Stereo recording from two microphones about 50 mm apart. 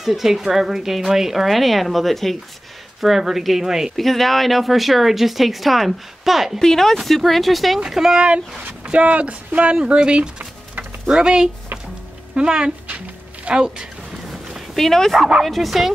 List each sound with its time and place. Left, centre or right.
0.0 s speech: centre
3.9 s speech: centre
6.6 s speech: centre
7.8 s speech: centre; by 9.8 s right
9.8 s speech: centre
14.1 s dog: centre
15.4 s speech: centre